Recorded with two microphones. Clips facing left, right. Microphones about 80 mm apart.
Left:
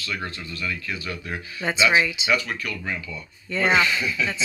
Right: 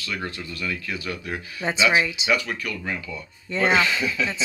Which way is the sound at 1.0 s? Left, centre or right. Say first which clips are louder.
Right 3 dB; left.